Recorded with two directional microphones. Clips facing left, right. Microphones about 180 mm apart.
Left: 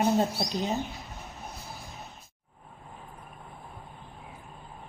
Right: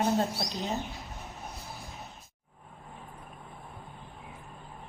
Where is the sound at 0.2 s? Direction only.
15° left (ahead or behind).